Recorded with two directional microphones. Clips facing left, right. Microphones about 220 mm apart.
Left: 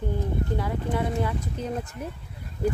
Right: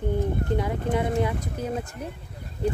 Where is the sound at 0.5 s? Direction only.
20° right (ahead or behind).